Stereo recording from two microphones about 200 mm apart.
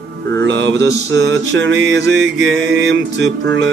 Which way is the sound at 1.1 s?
65° right (ahead or behind).